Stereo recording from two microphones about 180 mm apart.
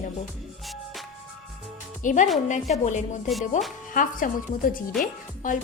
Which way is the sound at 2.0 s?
45° left (ahead or behind).